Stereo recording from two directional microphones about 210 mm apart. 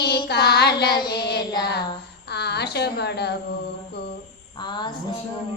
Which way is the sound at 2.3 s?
50° left (ahead or behind).